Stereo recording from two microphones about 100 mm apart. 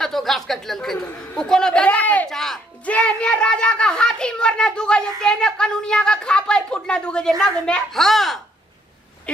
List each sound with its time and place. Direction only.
0.0 s a woman's voice: 5° left (ahead or behind)
2.2 s speech: 5° left (ahead or behind)